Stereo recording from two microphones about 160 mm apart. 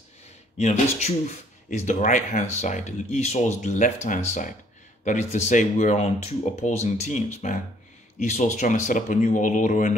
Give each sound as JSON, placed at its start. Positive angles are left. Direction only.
{"t": 0.6, "sound": "speech", "side_deg": 45}